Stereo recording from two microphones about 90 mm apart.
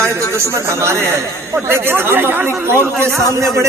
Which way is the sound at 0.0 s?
30° right (ahead or behind).